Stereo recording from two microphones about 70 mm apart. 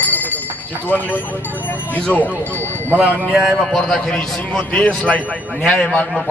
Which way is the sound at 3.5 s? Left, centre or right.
Centre.